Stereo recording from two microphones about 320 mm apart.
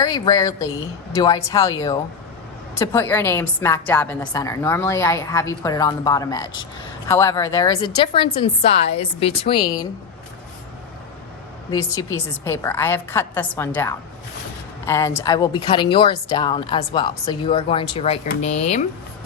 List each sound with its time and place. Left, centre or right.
0.0 s a woman's voice: centre
11.7 s a woman's voice: centre